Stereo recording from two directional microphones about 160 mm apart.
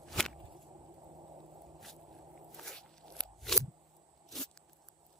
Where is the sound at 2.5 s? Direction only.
Centre (ahead or behind).